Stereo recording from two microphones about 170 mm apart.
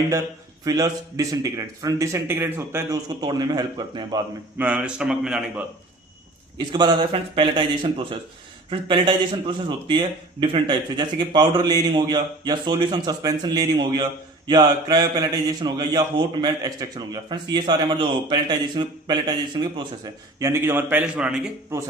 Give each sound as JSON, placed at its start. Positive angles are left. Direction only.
{"t": 0.6, "sound": "speech", "side_deg": -20}
{"t": 4.5, "sound": "a man's voice", "side_deg": -10}
{"t": 6.7, "sound": "speech", "side_deg": -25}
{"t": 20.4, "sound": "a man's voice", "side_deg": -15}